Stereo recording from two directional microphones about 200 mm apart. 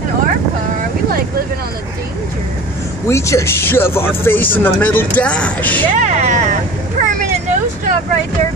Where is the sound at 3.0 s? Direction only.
15° left (ahead or behind).